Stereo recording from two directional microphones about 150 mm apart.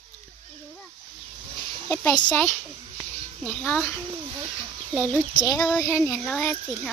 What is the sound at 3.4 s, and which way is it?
Speech, 10° left (ahead or behind).